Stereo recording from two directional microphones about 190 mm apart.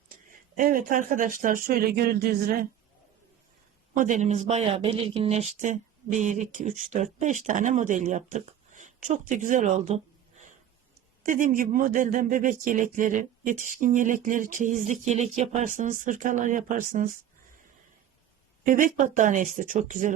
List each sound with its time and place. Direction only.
0.3 s speech: 45° right (ahead or behind)
3.9 s speech: 40° right (ahead or behind)
18.6 s speech: 45° right (ahead or behind)